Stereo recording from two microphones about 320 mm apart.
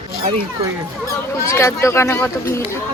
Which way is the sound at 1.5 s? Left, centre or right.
Centre.